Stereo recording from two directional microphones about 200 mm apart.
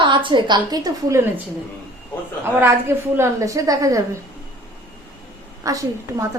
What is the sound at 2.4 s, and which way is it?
A woman's voice, 10° right (ahead or behind).